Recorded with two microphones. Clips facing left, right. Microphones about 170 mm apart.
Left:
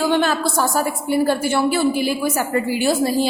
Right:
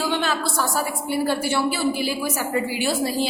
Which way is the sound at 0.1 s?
45° left (ahead or behind).